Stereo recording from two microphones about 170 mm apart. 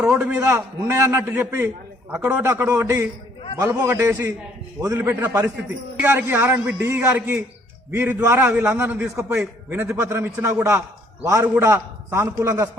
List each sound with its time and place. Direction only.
0.0 s a man's voice: 5° right (ahead or behind)